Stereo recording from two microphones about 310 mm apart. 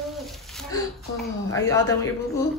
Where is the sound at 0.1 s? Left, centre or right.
Centre.